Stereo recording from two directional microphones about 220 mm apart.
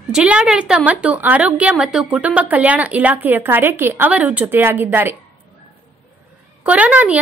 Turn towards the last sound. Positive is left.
turn(degrees=-5)  # may be behind; listen again after turning